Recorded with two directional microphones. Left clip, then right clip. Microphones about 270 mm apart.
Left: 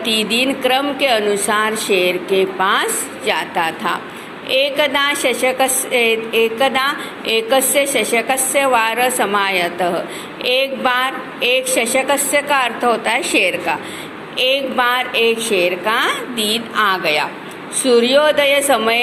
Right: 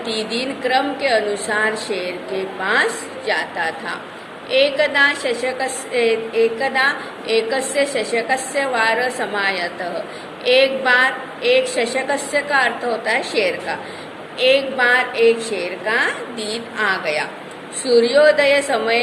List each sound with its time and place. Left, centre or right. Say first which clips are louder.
0.0 s a woman's voice: left 6 dB; centre
14.8 s a woman's voice: even; left
15.3 s a woman's voice: left 3 dB; centre
15.9 s a woman's voice: left 2 dB; left